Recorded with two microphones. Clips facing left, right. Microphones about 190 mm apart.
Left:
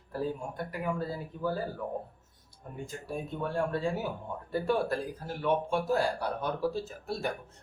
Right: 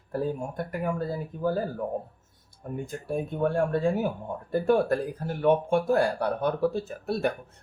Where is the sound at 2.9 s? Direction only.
50° right (ahead or behind).